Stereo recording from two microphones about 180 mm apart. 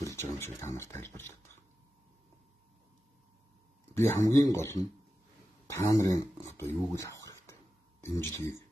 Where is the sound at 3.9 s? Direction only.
15° left (ahead or behind).